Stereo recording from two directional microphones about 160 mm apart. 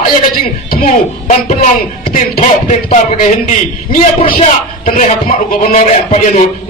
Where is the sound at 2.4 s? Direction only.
50° left (ahead or behind).